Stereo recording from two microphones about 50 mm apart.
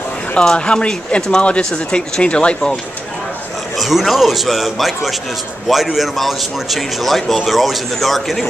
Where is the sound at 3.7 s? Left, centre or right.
Centre.